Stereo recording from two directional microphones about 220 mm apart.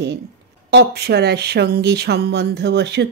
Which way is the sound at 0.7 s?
50° right (ahead or behind).